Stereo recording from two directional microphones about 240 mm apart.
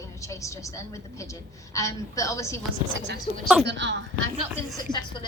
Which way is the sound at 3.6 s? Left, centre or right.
Right.